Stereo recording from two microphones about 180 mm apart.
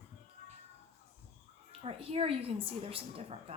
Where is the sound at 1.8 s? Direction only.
35° right (ahead or behind).